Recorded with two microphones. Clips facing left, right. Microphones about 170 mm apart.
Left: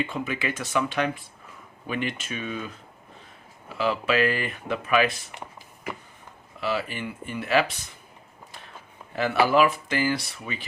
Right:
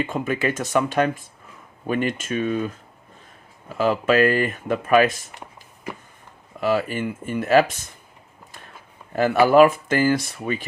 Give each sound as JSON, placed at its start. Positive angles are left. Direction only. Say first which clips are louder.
{"t": 0.0, "sound": "speech", "louder": "right 5 dB", "side_deg": -45}
{"t": 3.8, "sound": "speech", "louder": "right 6 dB", "side_deg": -45}
{"t": 6.6, "sound": "speech", "louder": "right 7 dB", "side_deg": -45}
{"t": 9.1, "sound": "speech", "louder": "right 6 dB", "side_deg": -45}